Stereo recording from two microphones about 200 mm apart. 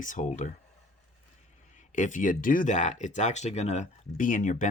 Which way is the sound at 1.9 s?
40° left (ahead or behind).